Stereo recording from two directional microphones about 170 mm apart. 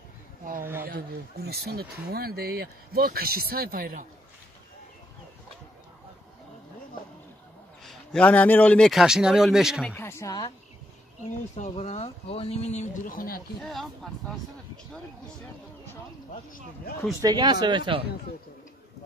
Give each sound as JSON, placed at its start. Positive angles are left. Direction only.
{"t": 0.8, "sound": "speech", "side_deg": -65}
{"t": 7.8, "sound": "a man's voice", "side_deg": 0}
{"t": 9.8, "sound": "a sound", "side_deg": 15}
{"t": 11.5, "sound": "speech", "side_deg": 45}
{"t": 13.6, "sound": "a man's voice", "side_deg": 0}
{"t": 17.2, "sound": "speech", "side_deg": -25}